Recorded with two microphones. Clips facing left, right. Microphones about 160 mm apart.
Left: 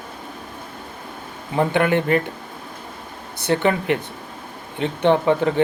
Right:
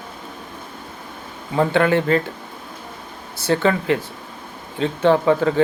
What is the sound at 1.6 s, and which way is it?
Speech, 20° left (ahead or behind).